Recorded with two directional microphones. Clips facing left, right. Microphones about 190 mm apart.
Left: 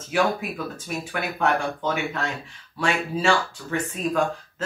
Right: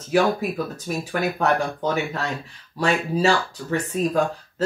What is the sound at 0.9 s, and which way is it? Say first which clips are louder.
Speech: right 5 dB; 40° right (ahead or behind).